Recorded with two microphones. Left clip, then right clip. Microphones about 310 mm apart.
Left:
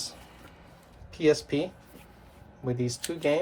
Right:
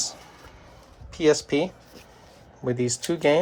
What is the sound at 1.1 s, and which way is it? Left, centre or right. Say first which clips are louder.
Speech: right 4 dB; right.